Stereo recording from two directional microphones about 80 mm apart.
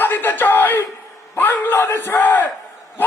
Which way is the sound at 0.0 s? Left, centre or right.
Left.